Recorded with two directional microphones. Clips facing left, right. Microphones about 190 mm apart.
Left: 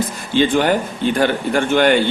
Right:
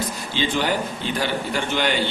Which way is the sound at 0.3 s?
55° left (ahead or behind).